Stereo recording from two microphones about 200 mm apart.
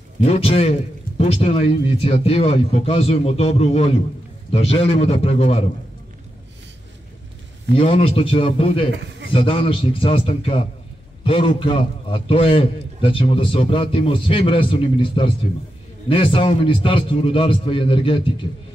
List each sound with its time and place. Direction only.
0.2 s a man's voice: 30° left (ahead or behind)
7.7 s a man's voice: 30° left (ahead or behind)